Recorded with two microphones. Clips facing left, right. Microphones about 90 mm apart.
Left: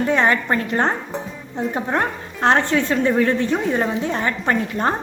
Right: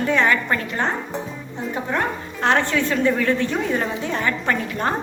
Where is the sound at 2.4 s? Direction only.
30° left (ahead or behind).